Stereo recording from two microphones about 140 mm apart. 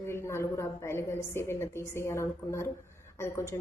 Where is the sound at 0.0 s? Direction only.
20° left (ahead or behind).